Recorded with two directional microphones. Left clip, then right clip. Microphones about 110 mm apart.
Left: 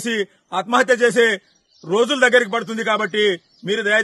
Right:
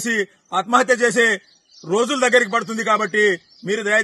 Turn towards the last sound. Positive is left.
turn(degrees=35)  # may be behind; listen again after turning